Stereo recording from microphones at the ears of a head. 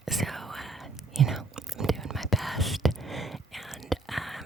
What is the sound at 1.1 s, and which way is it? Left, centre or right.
Whispering, right.